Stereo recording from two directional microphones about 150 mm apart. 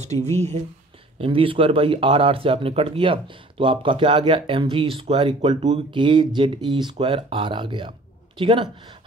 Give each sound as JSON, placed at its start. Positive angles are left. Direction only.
{"t": 0.0, "sound": "speech", "side_deg": -50}